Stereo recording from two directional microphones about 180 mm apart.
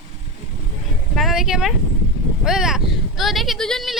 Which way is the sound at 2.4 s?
5° right (ahead or behind).